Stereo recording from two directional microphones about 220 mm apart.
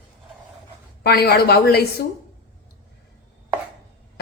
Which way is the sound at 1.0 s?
45° left (ahead or behind).